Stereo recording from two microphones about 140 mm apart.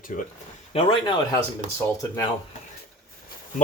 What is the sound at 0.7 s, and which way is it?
Speech, 40° left (ahead or behind).